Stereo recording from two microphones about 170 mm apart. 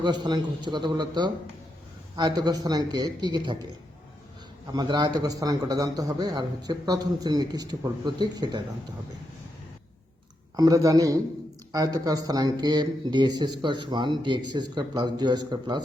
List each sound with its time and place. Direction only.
0.0 s speech: 25° right (ahead or behind)
10.6 s speech: 20° right (ahead or behind)